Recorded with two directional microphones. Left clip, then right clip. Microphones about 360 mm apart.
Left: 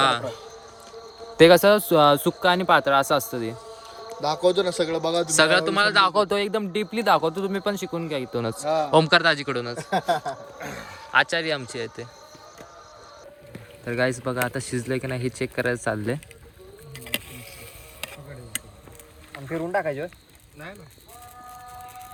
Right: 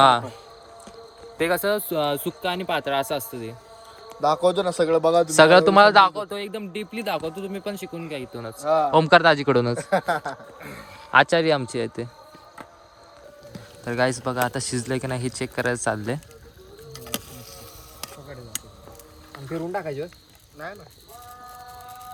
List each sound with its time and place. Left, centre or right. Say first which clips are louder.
0.0 s a man's voice: right 5 dB; centre
1.4 s speech: left 10 dB; left
1.6 s speech: left 7 dB; centre
4.1 s a man's voice: right 2 dB; centre
6.3 s speech: left 7 dB; centre
8.4 s a man's voice: left 7 dB; left
8.6 s a man's voice: right 2 dB; centre
13.8 s a man's voice: right 1 dB; centre
19.7 s speech: left 6 dB; centre